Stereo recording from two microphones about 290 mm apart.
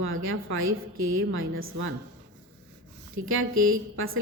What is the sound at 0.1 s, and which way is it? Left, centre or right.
A woman's voice, right.